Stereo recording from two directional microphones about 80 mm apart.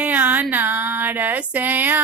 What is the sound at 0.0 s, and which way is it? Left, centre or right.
Female singing, right.